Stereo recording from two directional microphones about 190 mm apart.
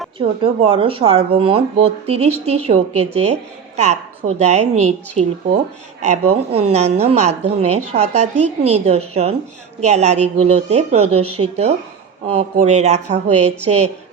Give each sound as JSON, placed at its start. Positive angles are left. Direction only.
{"t": 0.4, "sound": "speech", "side_deg": -30}